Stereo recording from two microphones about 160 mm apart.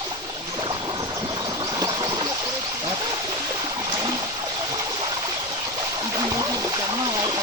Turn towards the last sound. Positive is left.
turn(degrees=-25)  # may be behind; listen again after turning